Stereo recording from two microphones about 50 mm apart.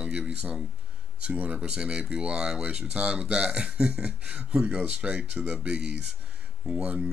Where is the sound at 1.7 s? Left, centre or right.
Centre.